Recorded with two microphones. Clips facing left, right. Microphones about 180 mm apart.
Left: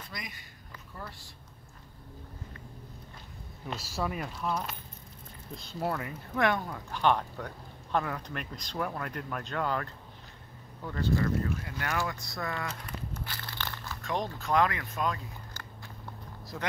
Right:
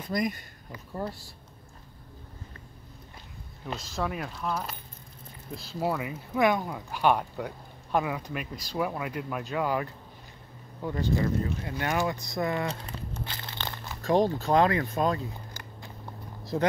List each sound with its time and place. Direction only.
0.1 s speech: 45° right (ahead or behind)
3.6 s speech: 5° left (ahead or behind); by 13.2 s 30° right (ahead or behind)
13.2 s crumpling: 20° right (ahead or behind)
14.0 s speech: 30° right (ahead or behind)
16.5 s speech: 30° right (ahead or behind)